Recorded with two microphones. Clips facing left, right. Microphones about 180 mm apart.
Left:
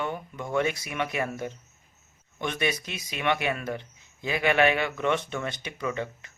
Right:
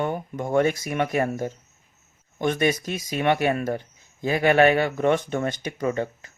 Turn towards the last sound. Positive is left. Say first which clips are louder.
# right 6 dB
turn(degrees=-40)  # may be behind; listen again after turning